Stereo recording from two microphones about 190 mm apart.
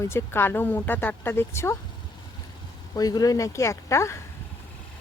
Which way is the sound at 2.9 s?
20° left (ahead or behind).